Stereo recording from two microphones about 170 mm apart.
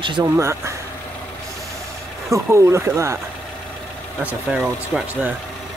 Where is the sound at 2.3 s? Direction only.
20° right (ahead or behind).